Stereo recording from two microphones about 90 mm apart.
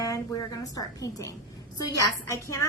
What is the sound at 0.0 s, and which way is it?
A woman's voice, 40° left (ahead or behind).